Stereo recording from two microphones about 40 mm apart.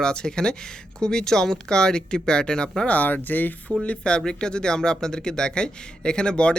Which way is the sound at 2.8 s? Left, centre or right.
Left.